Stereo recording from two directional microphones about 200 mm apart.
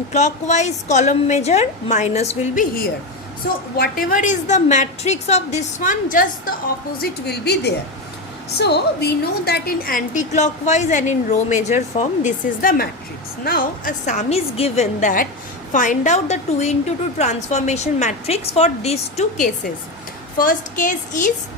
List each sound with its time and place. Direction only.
0.1 s a woman's voice: 35° left (ahead or behind)
3.8 s a woman's voice: 45° left (ahead or behind)
7.0 s a woman's voice: 55° left (ahead or behind)